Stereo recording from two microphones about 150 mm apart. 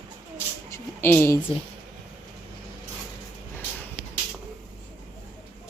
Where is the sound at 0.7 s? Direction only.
15° left (ahead or behind).